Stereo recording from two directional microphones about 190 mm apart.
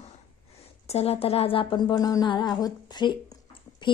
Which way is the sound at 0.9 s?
30° left (ahead or behind).